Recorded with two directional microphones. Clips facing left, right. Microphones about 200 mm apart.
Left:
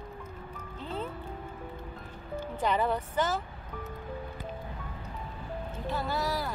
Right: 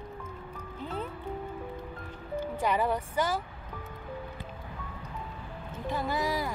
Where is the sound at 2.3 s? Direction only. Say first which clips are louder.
Right 1 dB; 10° right (ahead or behind).